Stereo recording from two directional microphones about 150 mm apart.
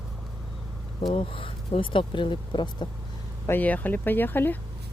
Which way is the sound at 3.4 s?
10° left (ahead or behind).